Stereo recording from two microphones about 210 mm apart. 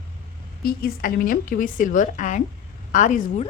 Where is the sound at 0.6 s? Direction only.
45° left (ahead or behind).